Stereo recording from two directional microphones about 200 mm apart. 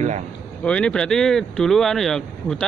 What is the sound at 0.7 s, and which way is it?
Speech, 5° left (ahead or behind).